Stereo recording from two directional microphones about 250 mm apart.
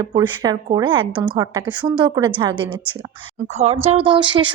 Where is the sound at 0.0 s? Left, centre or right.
Centre.